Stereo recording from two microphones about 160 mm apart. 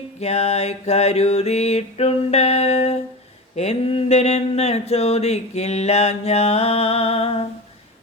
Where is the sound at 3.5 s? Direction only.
45° left (ahead or behind).